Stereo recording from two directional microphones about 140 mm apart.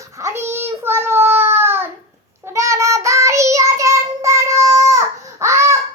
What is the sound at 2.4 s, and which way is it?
Child singing, 20° right (ahead or behind).